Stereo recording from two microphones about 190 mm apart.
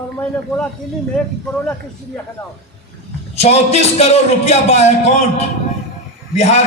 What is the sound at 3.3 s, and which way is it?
A man's voice, 35° left (ahead or behind).